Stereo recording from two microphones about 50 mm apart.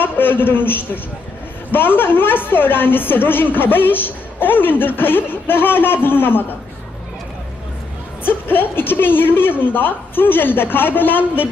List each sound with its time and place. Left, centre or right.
0.0 s a man's voice: left
8.2 s a woman's voice: left